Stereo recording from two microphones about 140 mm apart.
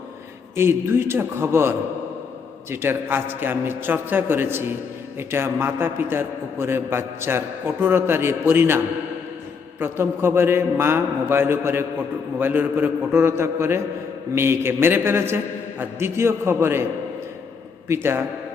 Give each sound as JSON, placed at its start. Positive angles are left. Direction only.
{"t": 0.5, "sound": "a man's voice", "side_deg": -15}
{"t": 9.8, "sound": "a man's voice", "side_deg": -15}
{"t": 17.8, "sound": "a man's voice", "side_deg": -15}